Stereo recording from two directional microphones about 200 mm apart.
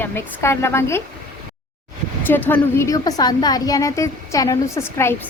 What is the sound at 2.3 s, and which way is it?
A woman's voice, 10° left (ahead or behind).